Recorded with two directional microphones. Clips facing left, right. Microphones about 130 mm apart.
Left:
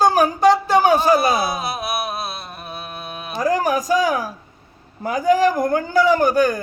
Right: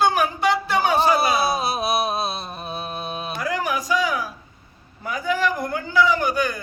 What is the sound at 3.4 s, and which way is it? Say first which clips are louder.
A man's voice: left 7 dB; 40° left (ahead or behind).